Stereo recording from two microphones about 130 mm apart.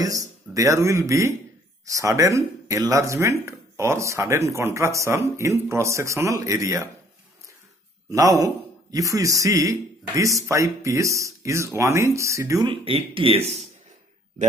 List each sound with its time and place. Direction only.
0.0 s speech: 25° right (ahead or behind)
8.1 s speech: 25° right (ahead or behind)
12.6 s speech: 45° right (ahead or behind)